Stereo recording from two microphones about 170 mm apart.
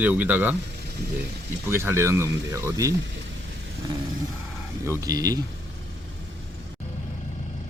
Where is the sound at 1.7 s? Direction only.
15° right (ahead or behind).